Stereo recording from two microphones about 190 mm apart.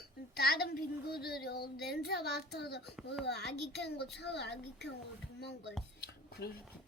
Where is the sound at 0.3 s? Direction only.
55° left (ahead or behind).